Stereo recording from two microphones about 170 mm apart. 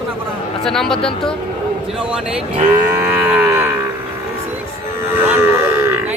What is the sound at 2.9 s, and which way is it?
Livestock, 10° right (ahead or behind).